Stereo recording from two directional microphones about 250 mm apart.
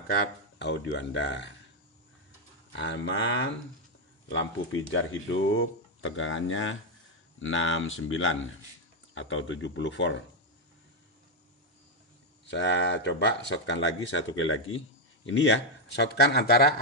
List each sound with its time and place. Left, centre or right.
0.6 s speech: left
2.7 s speech: left
12.4 s speech: left